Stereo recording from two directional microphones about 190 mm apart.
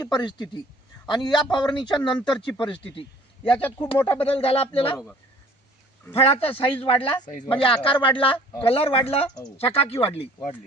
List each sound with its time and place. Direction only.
0.0 s a man's voice: 20° left (ahead or behind)
3.5 s speech: 10° left (ahead or behind)
4.2 s a man's voice: 30° left (ahead or behind)
6.1 s speech: 30° left (ahead or behind)
6.5 s speech: 10° left (ahead or behind)
6.8 s a man's voice: 30° left (ahead or behind)